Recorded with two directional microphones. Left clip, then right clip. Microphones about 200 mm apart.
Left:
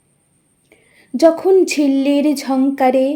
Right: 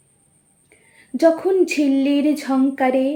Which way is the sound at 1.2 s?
30° left (ahead or behind).